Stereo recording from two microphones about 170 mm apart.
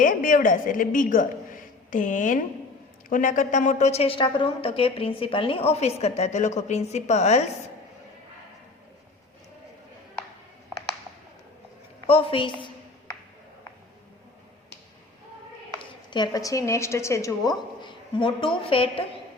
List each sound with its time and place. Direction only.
0.0 s a woman's voice: 50° left (ahead or behind)
12.0 s a sound: 35° left (ahead or behind)
15.8 s a woman's voice: 25° left (ahead or behind)